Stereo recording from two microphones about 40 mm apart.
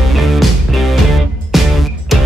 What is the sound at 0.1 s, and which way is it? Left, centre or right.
Music, centre.